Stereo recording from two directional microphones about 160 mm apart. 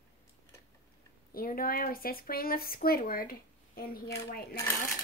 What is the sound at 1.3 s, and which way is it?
Speech, 65° left (ahead or behind).